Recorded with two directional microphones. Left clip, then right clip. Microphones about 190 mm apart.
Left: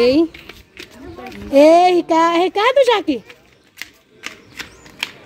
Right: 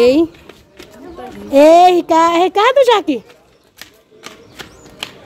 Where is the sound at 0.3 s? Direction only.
15° right (ahead or behind).